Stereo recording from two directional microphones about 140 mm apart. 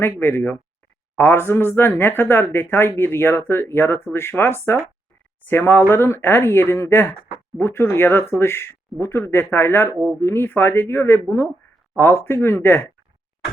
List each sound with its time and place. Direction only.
0.0 s speech: 15° left (ahead or behind)